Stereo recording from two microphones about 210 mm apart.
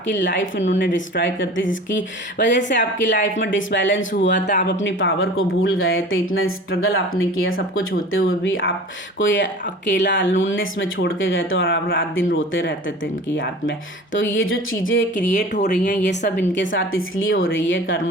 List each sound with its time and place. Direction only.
0.1 s speech: 60° left (ahead or behind)
15.4 s speech: 35° left (ahead or behind)
15.7 s speech: 50° left (ahead or behind)